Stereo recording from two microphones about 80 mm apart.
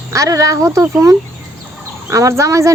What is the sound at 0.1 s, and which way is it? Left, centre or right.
Speech, right.